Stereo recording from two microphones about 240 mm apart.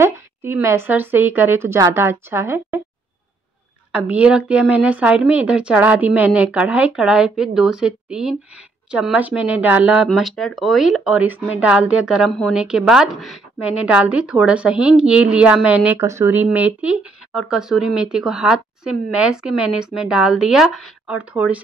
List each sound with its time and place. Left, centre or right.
0.0 s a woman's voice: centre
3.9 s speech: centre